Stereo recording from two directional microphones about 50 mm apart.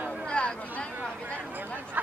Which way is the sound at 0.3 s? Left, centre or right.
Left.